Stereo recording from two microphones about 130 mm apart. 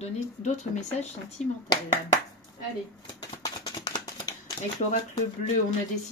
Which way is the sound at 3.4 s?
30° left (ahead or behind).